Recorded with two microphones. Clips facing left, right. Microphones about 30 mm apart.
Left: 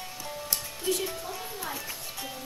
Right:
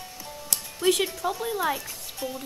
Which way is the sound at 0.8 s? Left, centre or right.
Right.